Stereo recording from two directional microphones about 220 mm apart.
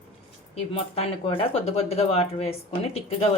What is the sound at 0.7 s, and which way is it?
Speech, 25° left (ahead or behind).